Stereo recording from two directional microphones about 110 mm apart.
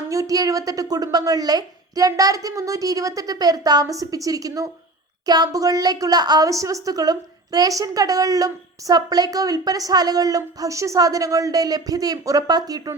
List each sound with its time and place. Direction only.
0.1 s a woman's voice: 30° right (ahead or behind)